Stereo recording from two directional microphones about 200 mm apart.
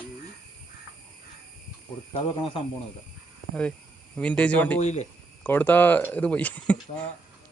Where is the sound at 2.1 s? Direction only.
25° left (ahead or behind).